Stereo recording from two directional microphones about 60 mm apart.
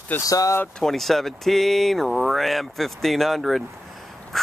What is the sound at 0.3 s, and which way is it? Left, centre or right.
Speech, left.